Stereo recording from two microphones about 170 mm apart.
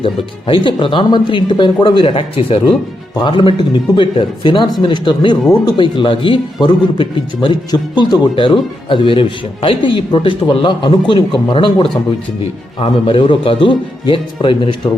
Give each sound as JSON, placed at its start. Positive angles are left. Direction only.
{"t": 0.0, "sound": "a man's voice", "side_deg": 30}